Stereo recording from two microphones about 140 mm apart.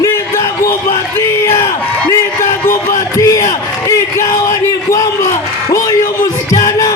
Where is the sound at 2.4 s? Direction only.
70° left (ahead or behind).